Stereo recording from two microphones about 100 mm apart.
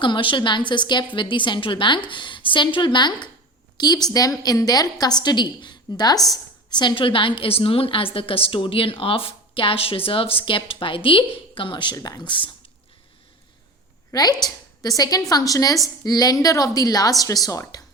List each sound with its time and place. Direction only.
0.0 s a woman's voice: 55° left (ahead or behind)
11.9 s a woman's voice: 40° left (ahead or behind)
14.1 s a woman's voice: 40° left (ahead or behind)